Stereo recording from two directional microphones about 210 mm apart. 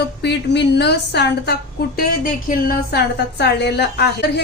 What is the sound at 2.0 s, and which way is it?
Speech, 40° left (ahead or behind).